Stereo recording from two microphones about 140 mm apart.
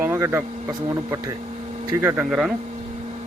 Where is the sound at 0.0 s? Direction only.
20° right (ahead or behind).